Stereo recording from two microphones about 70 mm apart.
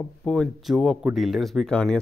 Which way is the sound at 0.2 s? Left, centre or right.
Centre.